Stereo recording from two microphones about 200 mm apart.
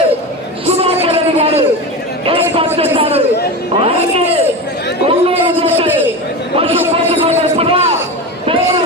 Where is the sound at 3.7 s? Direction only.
30° right (ahead or behind).